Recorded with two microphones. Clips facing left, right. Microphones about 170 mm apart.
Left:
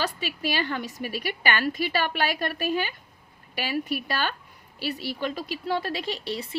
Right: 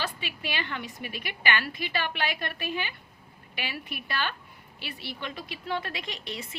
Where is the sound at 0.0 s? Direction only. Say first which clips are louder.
Left 6 dB; 40° left (ahead or behind).